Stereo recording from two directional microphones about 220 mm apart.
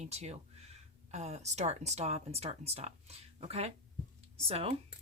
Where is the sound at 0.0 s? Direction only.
30° right (ahead or behind).